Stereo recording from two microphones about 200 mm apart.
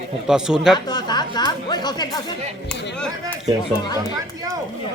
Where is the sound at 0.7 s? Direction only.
20° left (ahead or behind).